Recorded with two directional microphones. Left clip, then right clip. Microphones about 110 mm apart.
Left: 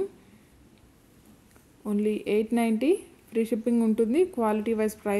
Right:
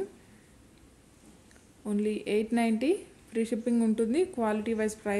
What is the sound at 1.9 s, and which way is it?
A woman's voice, 25° left (ahead or behind).